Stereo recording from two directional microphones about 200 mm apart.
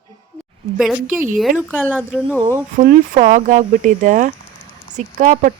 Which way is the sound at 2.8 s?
40° right (ahead or behind).